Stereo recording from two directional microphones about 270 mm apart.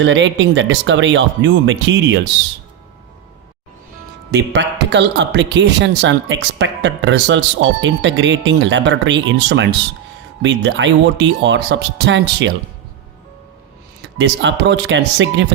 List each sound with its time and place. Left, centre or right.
0.0 s speech: right
4.3 s a man's voice: right
14.0 s a man's voice: right